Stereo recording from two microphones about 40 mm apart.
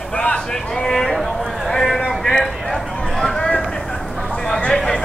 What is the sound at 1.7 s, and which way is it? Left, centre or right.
Speech, centre.